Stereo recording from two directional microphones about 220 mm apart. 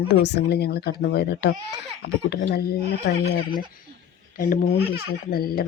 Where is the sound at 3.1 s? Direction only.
50° left (ahead or behind).